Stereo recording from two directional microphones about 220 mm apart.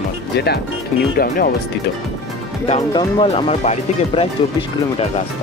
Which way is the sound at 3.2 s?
30° left (ahead or behind).